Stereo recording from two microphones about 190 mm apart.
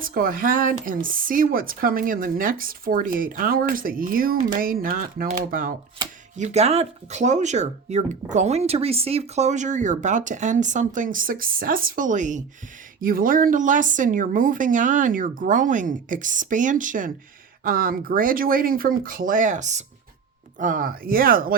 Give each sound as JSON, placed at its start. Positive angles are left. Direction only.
{"t": 0.0, "sound": "a woman's voice", "side_deg": -50}